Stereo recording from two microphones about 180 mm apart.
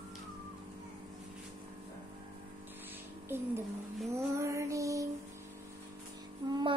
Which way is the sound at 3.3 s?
15° right (ahead or behind).